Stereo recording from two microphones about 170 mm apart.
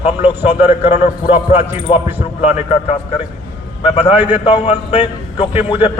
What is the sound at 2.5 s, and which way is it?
Speech, 40° left (ahead or behind).